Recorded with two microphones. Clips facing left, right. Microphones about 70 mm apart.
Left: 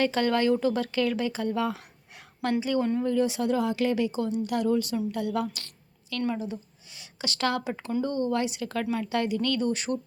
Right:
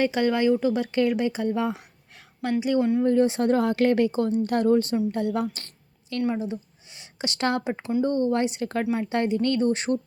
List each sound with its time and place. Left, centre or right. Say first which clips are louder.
0.0 s speech: right 2 dB; centre
3.0 s a woman's voice: right 5 dB; right